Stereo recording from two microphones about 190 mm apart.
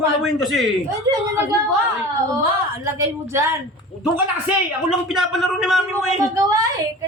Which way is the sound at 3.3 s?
15° right (ahead or behind).